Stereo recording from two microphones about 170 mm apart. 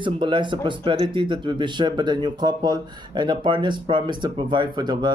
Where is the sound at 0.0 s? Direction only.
30° right (ahead or behind).